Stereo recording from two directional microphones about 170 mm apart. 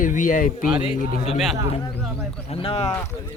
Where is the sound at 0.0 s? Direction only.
50° left (ahead or behind).